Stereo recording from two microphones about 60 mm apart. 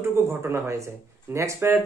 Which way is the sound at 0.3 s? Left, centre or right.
Right.